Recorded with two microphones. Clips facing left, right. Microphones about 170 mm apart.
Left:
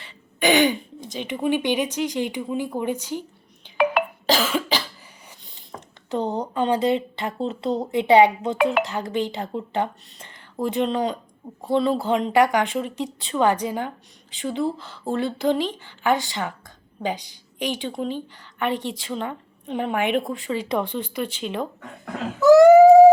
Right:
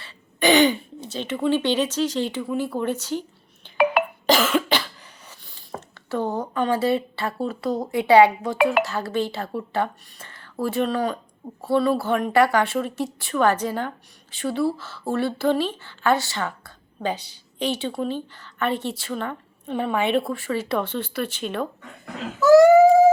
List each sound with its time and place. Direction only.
0.0 s speech: 10° left (ahead or behind)
3.8 s cough: 5° right (ahead or behind)
5.3 s a sound: 20° left (ahead or behind)
6.1 s a woman's voice: 20° left (ahead or behind)